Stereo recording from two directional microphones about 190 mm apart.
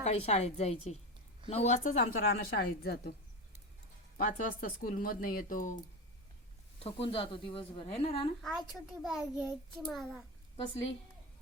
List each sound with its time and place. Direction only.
0.0 s a woman's voice: 35° left (ahead or behind); by 3.1 s 55° left (ahead or behind)
4.2 s a woman's voice: 50° left (ahead or behind)
6.7 s speech: 30° left (ahead or behind)
8.4 s a child's voice: centre (ahead or behind)